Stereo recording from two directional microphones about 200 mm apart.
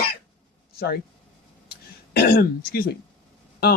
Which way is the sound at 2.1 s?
50° left (ahead or behind).